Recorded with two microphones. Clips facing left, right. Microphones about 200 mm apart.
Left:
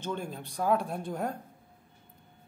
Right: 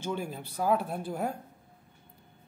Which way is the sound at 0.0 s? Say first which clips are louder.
Right 1 dB; 5° right (ahead or behind).